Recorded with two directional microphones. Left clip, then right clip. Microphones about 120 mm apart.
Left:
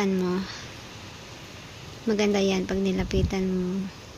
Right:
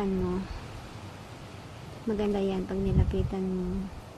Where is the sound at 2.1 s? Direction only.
25° left (ahead or behind).